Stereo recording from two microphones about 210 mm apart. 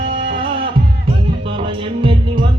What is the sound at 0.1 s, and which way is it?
Music, 25° right (ahead or behind).